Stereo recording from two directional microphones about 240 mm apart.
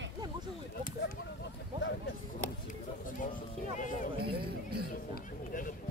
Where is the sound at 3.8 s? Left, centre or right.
Left.